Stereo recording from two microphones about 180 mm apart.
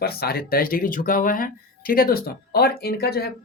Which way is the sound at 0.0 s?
60° left (ahead or behind).